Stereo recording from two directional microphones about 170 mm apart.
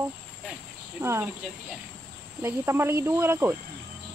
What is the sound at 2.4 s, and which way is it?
Speech, 15° right (ahead or behind).